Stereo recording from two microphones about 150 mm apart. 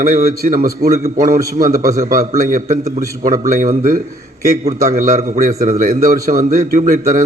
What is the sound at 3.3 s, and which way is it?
Speech, 65° right (ahead or behind).